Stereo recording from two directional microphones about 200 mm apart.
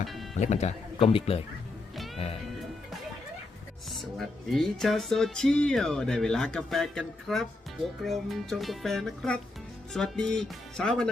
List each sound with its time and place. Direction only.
0.0 s music: centre (ahead or behind)
0.3 s speech: 35° left (ahead or behind)
4.2 s speech: centre (ahead or behind)